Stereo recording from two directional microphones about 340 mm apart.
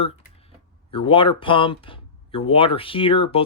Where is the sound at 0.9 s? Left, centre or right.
Centre.